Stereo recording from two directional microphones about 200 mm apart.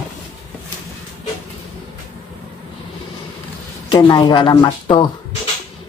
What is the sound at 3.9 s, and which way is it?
Speech, 20° left (ahead or behind).